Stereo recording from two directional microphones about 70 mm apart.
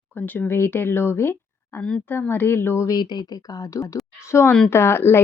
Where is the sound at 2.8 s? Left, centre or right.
Left.